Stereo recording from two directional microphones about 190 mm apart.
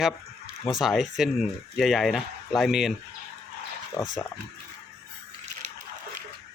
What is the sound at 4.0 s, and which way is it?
Speech, 15° left (ahead or behind).